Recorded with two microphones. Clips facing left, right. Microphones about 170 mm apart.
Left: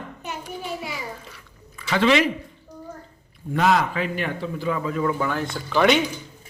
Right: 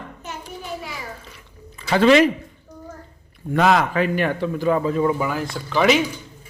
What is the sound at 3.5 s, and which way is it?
A man's voice, 70° right (ahead or behind).